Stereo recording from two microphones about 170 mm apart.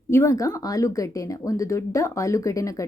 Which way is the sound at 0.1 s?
15° left (ahead or behind).